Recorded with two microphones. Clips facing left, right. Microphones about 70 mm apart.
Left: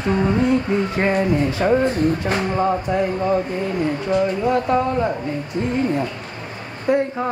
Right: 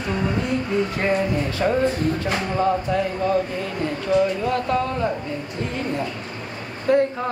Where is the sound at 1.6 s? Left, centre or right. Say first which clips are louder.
Left 2 dB; centre.